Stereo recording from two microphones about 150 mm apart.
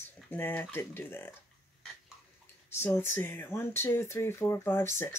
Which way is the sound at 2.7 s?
15° left (ahead or behind).